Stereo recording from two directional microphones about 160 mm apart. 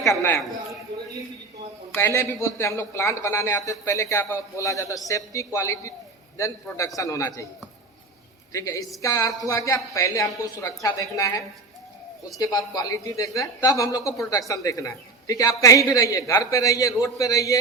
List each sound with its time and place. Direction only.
0.1 s a man's voice: 20° left (ahead or behind)
2.0 s a man's voice: 15° left (ahead or behind)
8.5 s speech: 20° left (ahead or behind)